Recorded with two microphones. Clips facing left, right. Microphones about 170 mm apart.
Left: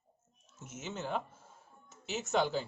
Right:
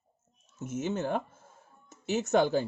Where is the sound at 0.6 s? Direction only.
55° right (ahead or behind).